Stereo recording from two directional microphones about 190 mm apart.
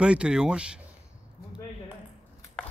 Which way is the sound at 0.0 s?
5° right (ahead or behind).